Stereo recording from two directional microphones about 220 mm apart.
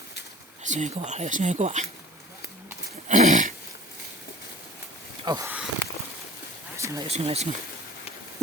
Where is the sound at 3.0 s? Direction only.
35° right (ahead or behind).